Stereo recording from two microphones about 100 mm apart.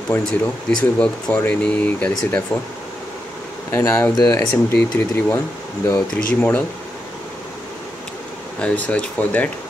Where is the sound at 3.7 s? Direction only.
25° left (ahead or behind).